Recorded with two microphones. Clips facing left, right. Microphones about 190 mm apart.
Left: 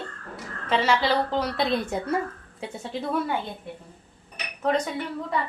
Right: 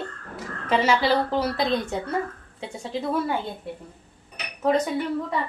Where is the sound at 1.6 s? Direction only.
5° left (ahead or behind).